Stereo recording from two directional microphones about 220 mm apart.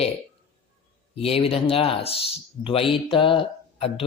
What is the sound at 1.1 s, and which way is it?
Speech, 25° left (ahead or behind).